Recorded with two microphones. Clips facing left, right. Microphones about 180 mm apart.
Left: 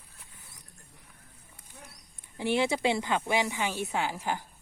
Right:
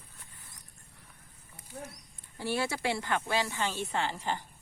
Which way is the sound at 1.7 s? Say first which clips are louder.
Right 9 dB; 50° right (ahead or behind).